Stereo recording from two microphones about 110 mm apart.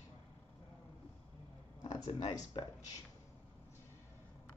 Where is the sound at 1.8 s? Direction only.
40° left (ahead or behind).